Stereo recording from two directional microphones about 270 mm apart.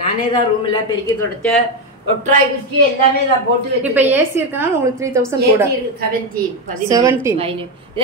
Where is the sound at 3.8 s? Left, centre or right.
Centre.